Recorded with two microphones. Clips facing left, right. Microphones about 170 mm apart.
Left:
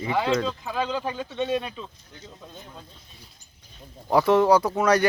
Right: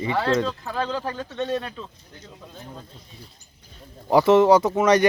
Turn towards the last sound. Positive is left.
turn(degrees=-10)  # may be behind; listen again after turning